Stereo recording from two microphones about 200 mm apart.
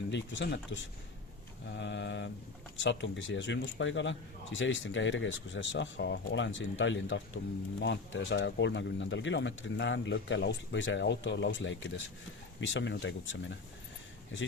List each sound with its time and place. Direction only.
0.1 s a man's voice: 60° left (ahead or behind)